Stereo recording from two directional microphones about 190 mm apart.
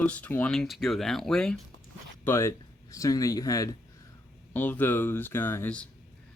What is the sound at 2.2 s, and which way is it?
Speech, 15° left (ahead or behind).